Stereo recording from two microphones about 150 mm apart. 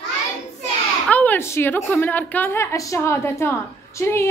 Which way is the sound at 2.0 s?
10° left (ahead or behind).